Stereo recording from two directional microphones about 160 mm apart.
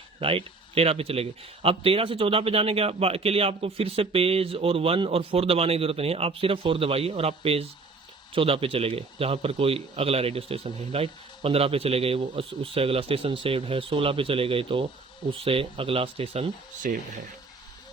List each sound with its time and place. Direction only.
0.2 s speech: 35° right (ahead or behind)
16.8 s speech: 60° right (ahead or behind)